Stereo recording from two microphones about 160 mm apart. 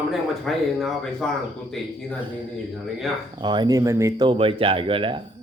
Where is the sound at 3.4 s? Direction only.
30° right (ahead or behind).